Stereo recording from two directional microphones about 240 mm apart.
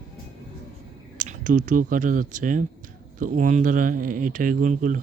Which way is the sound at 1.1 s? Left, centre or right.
Right.